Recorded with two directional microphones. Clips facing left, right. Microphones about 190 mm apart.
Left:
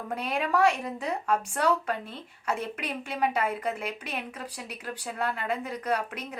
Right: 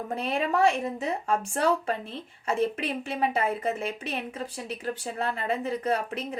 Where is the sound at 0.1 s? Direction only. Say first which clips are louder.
Even; 25° right (ahead or behind).